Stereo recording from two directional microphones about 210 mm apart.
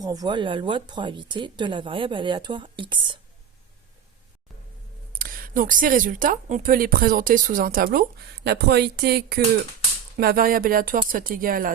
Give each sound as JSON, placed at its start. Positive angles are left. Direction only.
{"t": 0.0, "sound": "a woman's voice", "side_deg": -15}
{"t": 5.1, "sound": "speech", "side_deg": -45}